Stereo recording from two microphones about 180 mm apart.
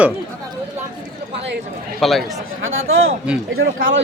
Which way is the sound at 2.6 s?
90° right.